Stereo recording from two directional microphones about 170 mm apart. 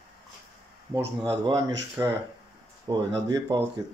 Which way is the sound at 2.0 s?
15° right (ahead or behind).